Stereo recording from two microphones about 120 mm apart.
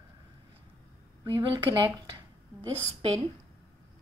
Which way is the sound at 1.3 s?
40° right (ahead or behind).